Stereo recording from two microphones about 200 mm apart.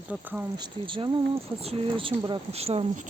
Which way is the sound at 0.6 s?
25° right (ahead or behind).